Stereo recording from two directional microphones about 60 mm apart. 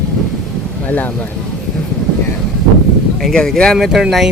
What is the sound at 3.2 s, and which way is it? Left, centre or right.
Speech, centre.